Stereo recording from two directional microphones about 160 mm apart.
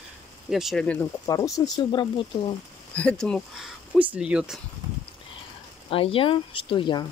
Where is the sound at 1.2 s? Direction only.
20° left (ahead or behind).